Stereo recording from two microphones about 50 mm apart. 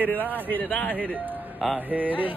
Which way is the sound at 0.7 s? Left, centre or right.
Left.